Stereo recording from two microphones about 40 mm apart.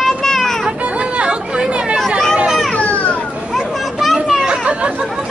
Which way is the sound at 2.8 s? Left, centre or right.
Left.